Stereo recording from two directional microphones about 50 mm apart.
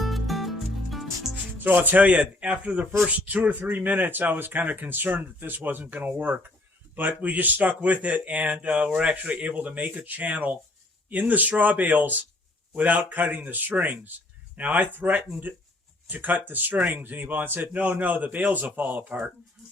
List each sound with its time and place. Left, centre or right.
0.0 s music: centre
1.5 s speech: right